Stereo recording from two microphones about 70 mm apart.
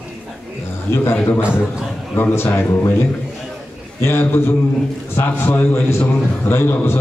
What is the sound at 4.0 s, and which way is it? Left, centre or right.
A man's voice, left.